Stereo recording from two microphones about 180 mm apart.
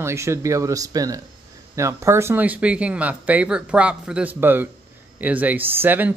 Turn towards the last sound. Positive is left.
turn(degrees=-10)  # may be behind; listen again after turning